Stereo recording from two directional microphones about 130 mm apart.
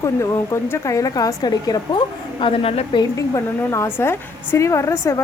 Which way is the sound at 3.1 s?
25° left (ahead or behind).